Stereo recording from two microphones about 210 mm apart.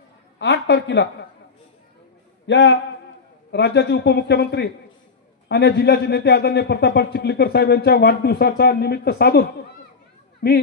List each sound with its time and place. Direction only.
0.4 s a woman's voice: 55° left (ahead or behind)
2.4 s a woman's voice: 60° left (ahead or behind)